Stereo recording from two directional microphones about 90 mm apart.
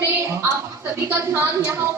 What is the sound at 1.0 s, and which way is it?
Speech, 30° right (ahead or behind).